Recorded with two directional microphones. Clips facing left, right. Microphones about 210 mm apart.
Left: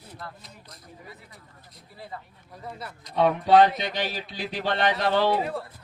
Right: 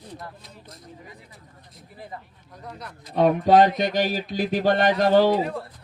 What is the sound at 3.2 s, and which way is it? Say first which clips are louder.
Speech: right 2 dB; 45° right (ahead or behind).